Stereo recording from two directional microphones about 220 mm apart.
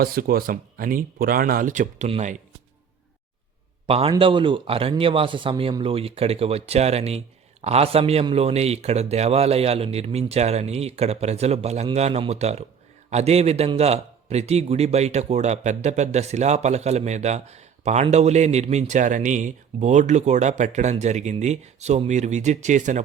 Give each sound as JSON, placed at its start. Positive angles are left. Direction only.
{"t": 0.0, "sound": "a man's voice", "side_deg": -45}
{"t": 3.8, "sound": "a man's voice", "side_deg": -25}